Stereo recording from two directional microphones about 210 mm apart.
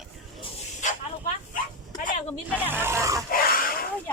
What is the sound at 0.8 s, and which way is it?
Snake, 35° left (ahead or behind).